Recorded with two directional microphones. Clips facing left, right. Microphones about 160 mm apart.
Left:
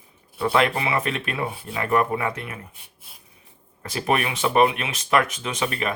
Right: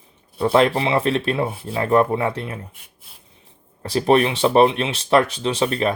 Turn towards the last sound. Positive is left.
turn(degrees=-35)  # may be behind; listen again after turning